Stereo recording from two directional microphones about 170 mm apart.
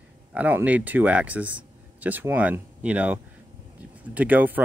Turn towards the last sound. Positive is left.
turn(degrees=-10)  # may be behind; listen again after turning